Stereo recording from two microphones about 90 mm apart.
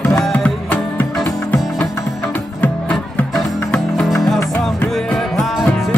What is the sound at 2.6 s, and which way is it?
Music, 20° left (ahead or behind).